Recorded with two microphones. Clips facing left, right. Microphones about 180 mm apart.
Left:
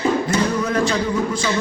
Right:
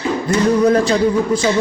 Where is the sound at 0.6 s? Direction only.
35° right (ahead or behind).